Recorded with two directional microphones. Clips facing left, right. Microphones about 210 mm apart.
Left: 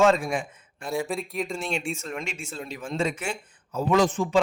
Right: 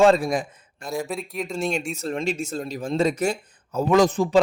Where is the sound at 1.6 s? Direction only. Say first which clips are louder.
Right 4 dB; 45° right (ahead or behind).